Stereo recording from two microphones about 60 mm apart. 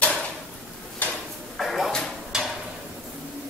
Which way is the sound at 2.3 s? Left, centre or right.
Centre.